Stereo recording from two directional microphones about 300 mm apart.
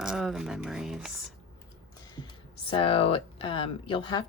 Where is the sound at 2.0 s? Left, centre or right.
Centre.